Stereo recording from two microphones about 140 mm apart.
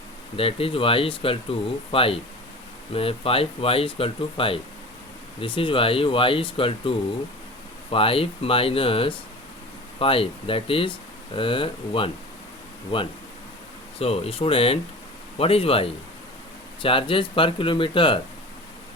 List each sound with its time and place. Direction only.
0.3 s speech: 40° left (ahead or behind)